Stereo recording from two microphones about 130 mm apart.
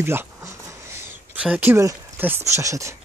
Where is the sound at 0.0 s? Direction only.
20° right (ahead or behind).